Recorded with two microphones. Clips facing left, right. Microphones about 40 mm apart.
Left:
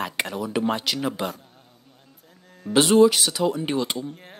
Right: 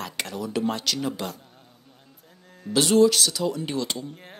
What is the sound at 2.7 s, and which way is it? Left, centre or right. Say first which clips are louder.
Speech: left 2 dB; left.